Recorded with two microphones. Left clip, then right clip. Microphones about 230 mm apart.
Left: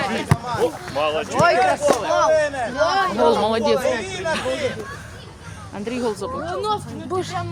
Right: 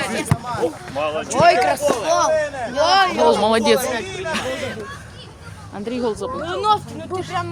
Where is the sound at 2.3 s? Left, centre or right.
Left.